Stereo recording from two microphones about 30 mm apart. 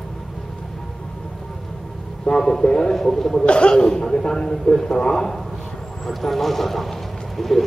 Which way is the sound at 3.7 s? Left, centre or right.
Left.